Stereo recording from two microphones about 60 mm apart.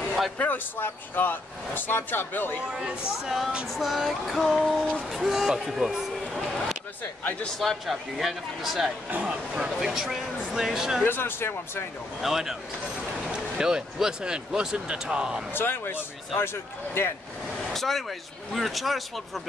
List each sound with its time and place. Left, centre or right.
0.4 s speech: left
0.7 s speech: left
2.6 s speech: centre
3.6 s speech: centre
9.1 s speech: right
9.5 s speech: centre
11.1 s speech: left
12.2 s speech: centre
15.5 s speech: left
17.7 s speech: centre